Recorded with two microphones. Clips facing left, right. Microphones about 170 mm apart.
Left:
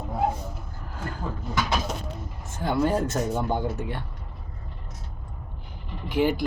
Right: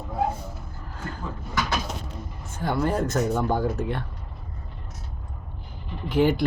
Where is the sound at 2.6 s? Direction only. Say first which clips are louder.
Left 1 dB; 25° left (ahead or behind).